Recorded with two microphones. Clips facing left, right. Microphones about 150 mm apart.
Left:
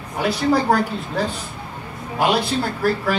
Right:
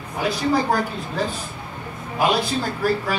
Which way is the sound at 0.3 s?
70° left (ahead or behind).